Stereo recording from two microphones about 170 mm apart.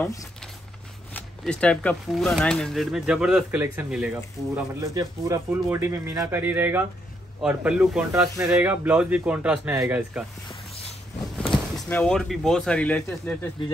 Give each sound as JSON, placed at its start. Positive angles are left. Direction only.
{"t": 1.1, "sound": "speech", "side_deg": 5}
{"t": 4.7, "sound": "speech", "side_deg": -20}
{"t": 8.1, "sound": "speech", "side_deg": -15}
{"t": 11.3, "sound": "a sound", "side_deg": 5}
{"t": 11.9, "sound": "speech", "side_deg": 5}